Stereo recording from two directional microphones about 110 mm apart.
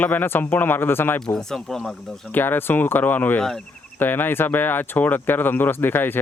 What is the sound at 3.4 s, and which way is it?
Speech, 5° left (ahead or behind).